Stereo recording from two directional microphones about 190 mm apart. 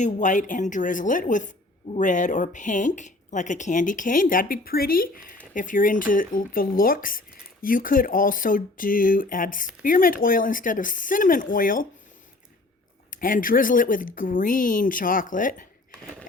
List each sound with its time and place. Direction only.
0.0 s speech: 40° left (ahead or behind)
13.1 s speech: 45° left (ahead or behind)